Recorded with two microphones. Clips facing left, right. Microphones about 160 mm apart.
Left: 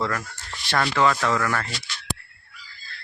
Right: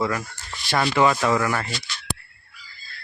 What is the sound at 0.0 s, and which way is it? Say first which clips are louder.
Speech: right 2 dB; 5° right (ahead or behind).